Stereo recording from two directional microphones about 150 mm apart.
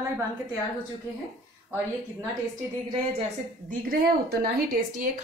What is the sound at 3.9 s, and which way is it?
Speech, 90° right.